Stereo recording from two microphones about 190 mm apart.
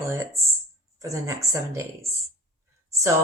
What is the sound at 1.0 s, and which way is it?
Speech, 15° right (ahead or behind).